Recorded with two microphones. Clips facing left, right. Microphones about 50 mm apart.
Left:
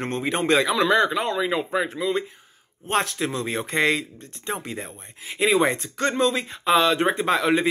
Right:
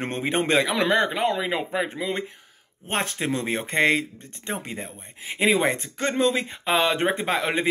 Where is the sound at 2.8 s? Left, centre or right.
Centre.